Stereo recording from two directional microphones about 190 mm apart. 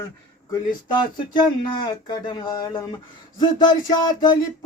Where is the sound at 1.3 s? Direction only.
25° left (ahead or behind).